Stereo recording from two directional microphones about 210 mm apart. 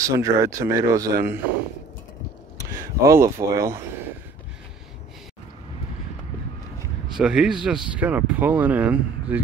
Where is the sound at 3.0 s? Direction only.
15° right (ahead or behind).